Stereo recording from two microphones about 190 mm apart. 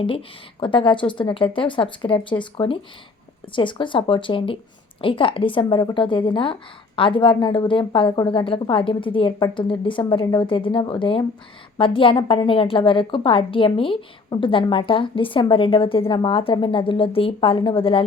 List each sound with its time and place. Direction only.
0.6 s a woman's voice: 25° left (ahead or behind)